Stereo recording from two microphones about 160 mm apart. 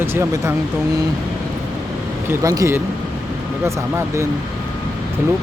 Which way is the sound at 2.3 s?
20° right (ahead or behind).